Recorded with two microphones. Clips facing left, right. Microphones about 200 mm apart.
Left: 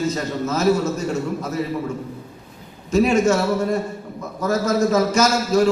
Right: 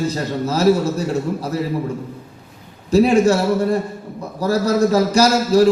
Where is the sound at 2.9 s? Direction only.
35° right (ahead or behind).